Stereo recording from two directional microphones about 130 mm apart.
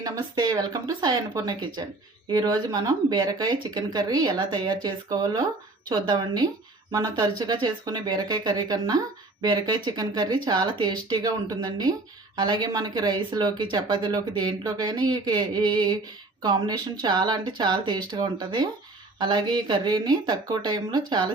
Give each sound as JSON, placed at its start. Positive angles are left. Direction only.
{"t": 0.0, "sound": "speech", "side_deg": -30}